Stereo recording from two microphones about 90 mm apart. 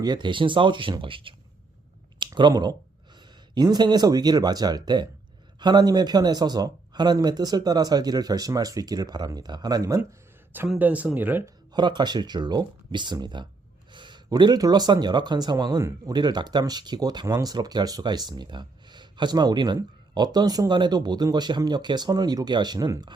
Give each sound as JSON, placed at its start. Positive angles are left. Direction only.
{"t": 0.0, "sound": "speech", "side_deg": -55}
{"t": 2.1, "sound": "a sound", "side_deg": -60}
{"t": 3.5, "sound": "speech", "side_deg": -50}
{"t": 10.8, "sound": "speech", "side_deg": -20}
{"t": 11.7, "sound": "speech", "side_deg": -55}